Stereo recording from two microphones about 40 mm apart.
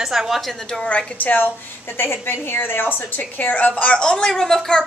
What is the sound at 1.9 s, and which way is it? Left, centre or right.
A woman's voice, left.